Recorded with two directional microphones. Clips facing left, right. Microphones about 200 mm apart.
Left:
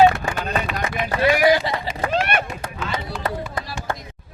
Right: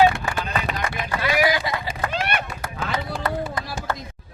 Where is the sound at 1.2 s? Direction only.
30° left (ahead or behind).